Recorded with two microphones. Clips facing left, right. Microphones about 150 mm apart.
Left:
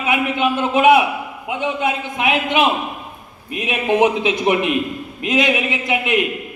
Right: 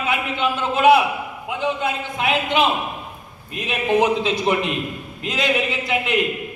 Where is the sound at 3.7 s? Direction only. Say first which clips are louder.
Left 2 dB; 15° left (ahead or behind).